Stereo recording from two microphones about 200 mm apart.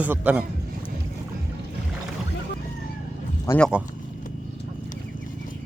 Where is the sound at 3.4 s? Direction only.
15° left (ahead or behind).